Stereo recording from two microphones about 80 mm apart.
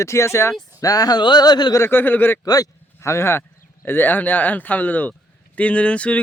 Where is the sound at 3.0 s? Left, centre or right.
Left.